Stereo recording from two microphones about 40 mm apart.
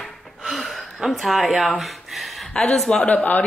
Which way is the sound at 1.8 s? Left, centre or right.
Centre.